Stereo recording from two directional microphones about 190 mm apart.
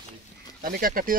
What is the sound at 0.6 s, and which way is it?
Speech, 50° right (ahead or behind).